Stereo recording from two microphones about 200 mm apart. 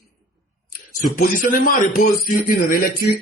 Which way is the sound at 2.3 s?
45° left (ahead or behind).